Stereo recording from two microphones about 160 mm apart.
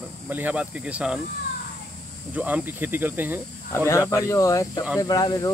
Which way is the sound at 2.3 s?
10° right (ahead or behind).